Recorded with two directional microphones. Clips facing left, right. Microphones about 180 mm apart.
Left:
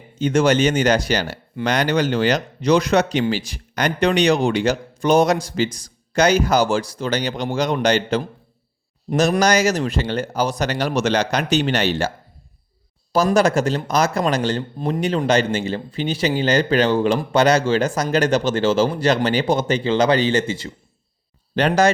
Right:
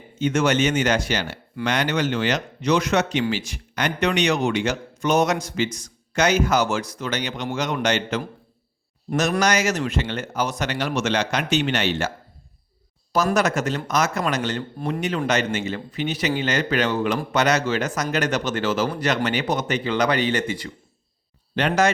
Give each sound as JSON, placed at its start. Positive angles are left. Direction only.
{"t": 0.2, "sound": "speech", "side_deg": 35}
{"t": 9.4, "sound": "speech", "side_deg": 35}
{"t": 13.3, "sound": "speech", "side_deg": 30}
{"t": 21.6, "sound": "speech", "side_deg": 35}